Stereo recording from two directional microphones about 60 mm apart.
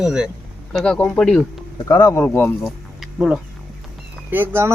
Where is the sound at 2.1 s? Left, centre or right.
Left.